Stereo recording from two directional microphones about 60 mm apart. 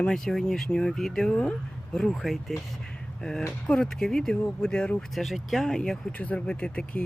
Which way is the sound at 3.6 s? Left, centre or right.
Centre.